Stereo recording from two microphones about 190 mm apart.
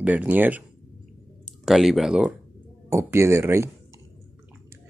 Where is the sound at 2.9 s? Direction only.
15° right (ahead or behind).